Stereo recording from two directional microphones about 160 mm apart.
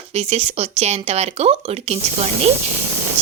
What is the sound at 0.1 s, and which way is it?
Speech, 40° right (ahead or behind).